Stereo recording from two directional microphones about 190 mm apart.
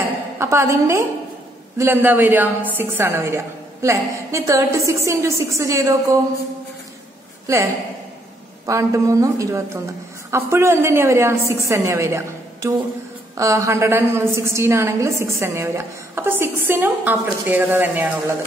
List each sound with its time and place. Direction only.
0.4 s a woman's voice: 15° right (ahead or behind)
7.4 s a woman's voice: 15° right (ahead or behind)
13.4 s a woman's voice: 15° right (ahead or behind)